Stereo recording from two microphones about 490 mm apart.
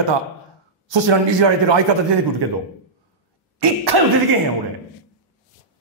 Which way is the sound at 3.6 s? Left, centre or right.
Right.